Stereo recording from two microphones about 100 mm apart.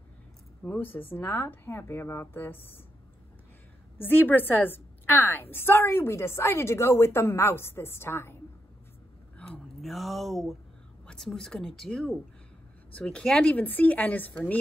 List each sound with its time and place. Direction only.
0.7 s a woman's voice: 20° left (ahead or behind)
4.0 s a woman's voice: 20° left (ahead or behind)
9.4 s a sound: 10° left (ahead or behind)
9.8 s a woman's voice: centre (ahead or behind); by 14.6 s 15° left (ahead or behind)